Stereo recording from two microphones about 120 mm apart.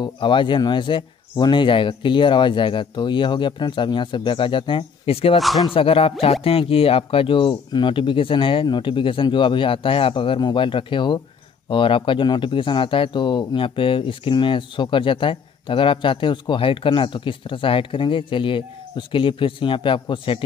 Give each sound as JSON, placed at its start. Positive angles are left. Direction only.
{"t": 0.0, "sound": "speech", "side_deg": 40}
{"t": 5.4, "sound": "speech", "side_deg": 0}
{"t": 5.7, "sound": "speech", "side_deg": 50}